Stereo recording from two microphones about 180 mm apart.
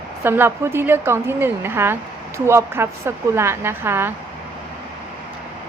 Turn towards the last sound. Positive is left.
turn(degrees=-10)  # may be behind; listen again after turning